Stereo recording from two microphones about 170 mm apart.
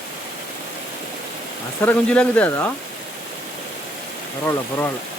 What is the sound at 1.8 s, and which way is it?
Speech, 10° left (ahead or behind).